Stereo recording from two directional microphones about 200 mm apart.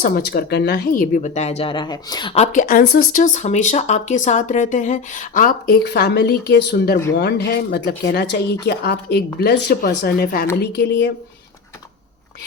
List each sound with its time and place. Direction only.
0.0 s speech: 55° left (ahead or behind); by 2.3 s 20° left (ahead or behind)
2.3 s speech: 35° left (ahead or behind); by 11.1 s 55° left (ahead or behind)